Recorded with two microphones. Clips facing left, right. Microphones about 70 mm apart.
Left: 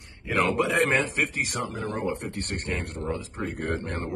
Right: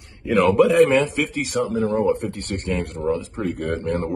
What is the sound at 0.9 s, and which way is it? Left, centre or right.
Speech, left.